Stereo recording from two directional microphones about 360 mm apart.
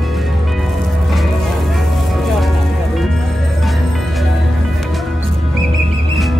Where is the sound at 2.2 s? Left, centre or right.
Centre.